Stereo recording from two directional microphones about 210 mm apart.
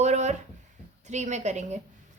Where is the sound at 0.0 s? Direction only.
35° right (ahead or behind).